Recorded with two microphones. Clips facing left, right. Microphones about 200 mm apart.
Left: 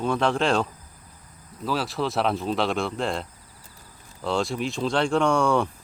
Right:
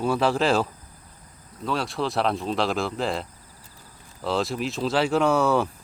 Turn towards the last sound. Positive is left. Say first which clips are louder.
# right 1 dB
turn(degrees=-5)  # may be behind; listen again after turning